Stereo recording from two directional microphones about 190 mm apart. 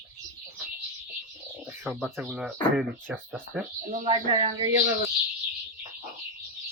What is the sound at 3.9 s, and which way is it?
Speech, 30° right (ahead or behind).